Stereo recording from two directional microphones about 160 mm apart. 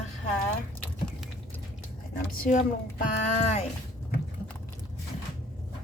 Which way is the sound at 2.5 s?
55° left (ahead or behind).